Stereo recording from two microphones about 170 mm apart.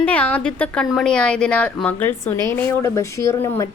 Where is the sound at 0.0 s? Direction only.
10° left (ahead or behind).